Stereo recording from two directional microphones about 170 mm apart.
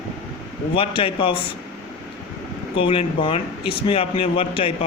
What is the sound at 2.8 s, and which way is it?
A man's voice, 30° left (ahead or behind).